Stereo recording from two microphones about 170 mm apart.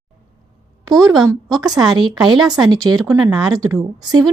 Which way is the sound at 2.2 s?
25° right (ahead or behind).